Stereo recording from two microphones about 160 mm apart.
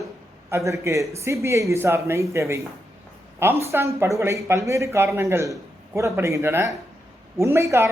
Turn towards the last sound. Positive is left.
turn(degrees=-15)  # may be behind; listen again after turning